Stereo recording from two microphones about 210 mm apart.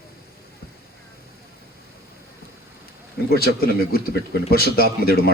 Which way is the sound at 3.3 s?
45° left (ahead or behind).